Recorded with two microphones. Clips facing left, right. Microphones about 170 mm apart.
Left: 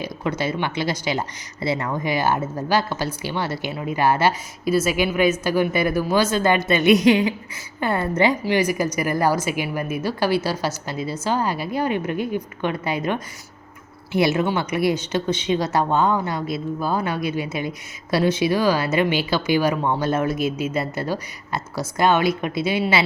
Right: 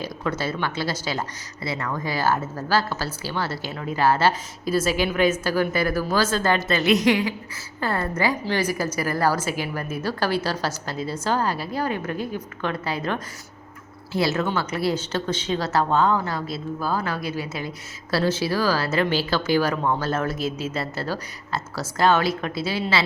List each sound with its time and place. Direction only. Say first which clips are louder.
0.0 s a woman's voice: left 2 dB; 15° left (ahead or behind)